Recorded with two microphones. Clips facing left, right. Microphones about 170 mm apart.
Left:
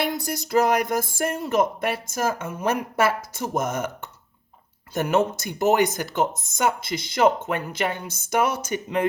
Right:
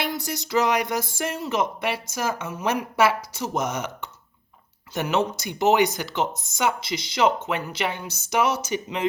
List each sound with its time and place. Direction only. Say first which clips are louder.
0.0 s speech: left 2 dB; 55° left (ahead or behind)